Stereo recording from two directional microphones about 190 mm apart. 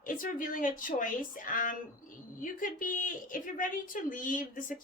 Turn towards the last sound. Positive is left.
turn(degrees=45)  # may be behind; listen again after turning